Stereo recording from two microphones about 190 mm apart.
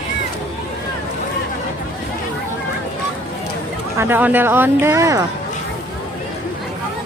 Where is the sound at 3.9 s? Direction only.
10° right (ahead or behind).